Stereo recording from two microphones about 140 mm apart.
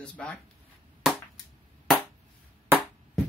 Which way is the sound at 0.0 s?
10° left (ahead or behind).